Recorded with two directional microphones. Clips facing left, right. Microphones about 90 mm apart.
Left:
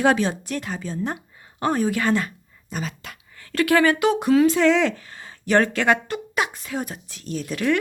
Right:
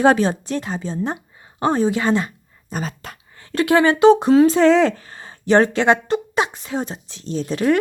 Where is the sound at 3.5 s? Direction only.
25° right (ahead or behind).